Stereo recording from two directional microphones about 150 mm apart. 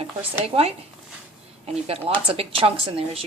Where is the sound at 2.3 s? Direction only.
40° right (ahead or behind).